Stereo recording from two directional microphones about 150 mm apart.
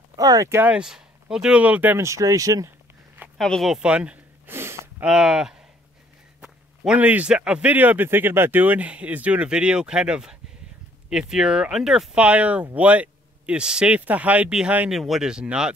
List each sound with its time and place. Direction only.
0.1 s speech: 25° right (ahead or behind)
3.3 s a sound: 5° left (ahead or behind); by 4.8 s 15° right (ahead or behind)
5.0 s speech: 5° right (ahead or behind)